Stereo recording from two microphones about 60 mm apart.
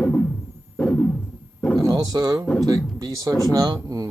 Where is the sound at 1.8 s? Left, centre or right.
Right.